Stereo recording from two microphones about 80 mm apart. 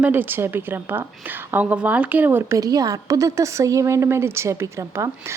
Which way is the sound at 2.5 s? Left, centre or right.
Right.